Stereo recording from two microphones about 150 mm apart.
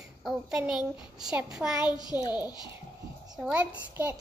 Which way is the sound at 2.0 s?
30° left (ahead or behind).